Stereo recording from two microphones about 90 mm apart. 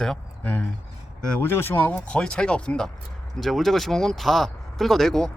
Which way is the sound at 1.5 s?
25° left (ahead or behind).